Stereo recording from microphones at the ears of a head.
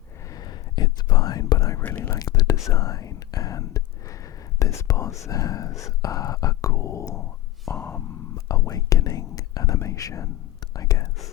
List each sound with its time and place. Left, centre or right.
0.3 s whispering: left